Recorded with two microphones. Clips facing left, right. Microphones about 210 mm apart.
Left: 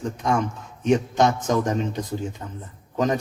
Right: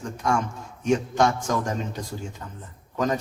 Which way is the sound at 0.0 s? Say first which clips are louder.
Left 2 dB; 20° left (ahead or behind).